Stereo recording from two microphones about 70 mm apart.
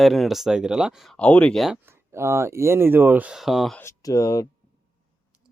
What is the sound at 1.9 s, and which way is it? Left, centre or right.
Speech, right.